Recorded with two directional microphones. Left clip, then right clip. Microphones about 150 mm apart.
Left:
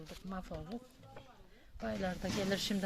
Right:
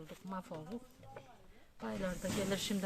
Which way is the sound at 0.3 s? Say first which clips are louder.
Right 1 dB; 10° left (ahead or behind).